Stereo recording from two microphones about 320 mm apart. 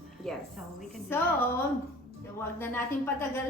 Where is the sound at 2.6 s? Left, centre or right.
Centre.